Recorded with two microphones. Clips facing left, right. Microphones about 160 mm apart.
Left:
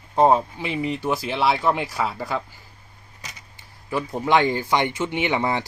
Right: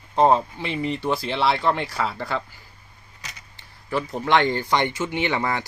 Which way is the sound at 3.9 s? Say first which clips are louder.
Left 1 dB; 15° left (ahead or behind).